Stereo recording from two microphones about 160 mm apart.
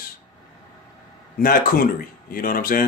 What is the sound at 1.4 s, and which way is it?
Speech, 65° left (ahead or behind).